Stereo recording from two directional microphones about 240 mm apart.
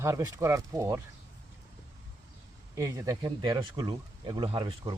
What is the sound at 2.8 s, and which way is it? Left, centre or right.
Speech, centre.